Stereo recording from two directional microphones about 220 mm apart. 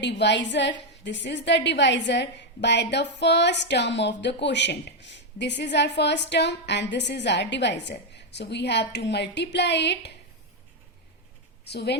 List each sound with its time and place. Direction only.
0.0 s a woman's voice: 50° left (ahead or behind)
11.6 s speech: 50° left (ahead or behind)